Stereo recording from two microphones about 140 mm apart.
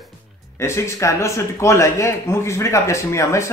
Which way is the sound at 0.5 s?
20° left (ahead or behind).